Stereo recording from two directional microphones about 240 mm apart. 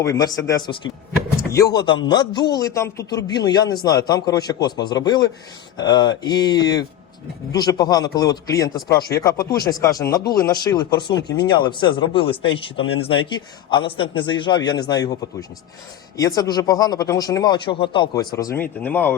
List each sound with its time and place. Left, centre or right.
0.0 s speech: centre
9.0 s speech: left
9.2 s speech: centre
11.1 s speech: left
11.5 s a man's voice: centre